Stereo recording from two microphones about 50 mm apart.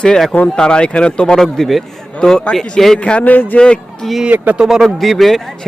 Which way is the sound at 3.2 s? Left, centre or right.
Left.